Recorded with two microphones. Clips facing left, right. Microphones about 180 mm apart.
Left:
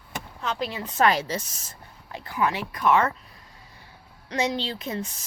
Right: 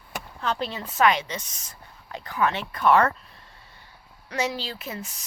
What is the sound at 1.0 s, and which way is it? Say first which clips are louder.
Speech: even; 35° left (ahead or behind).